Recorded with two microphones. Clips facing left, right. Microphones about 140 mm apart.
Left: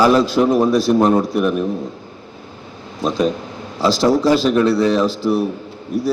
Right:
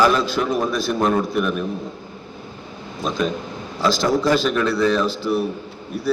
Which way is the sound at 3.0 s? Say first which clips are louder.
Left 5 dB; 35° left (ahead or behind).